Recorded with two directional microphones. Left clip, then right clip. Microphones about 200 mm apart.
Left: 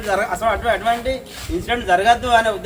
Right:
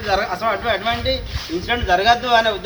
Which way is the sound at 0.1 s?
15° left (ahead or behind).